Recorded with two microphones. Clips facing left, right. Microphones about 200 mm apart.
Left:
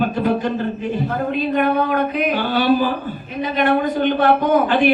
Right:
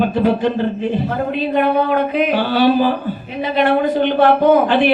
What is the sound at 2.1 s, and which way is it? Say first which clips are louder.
A man's voice: right 3 dB; 45° left (ahead or behind).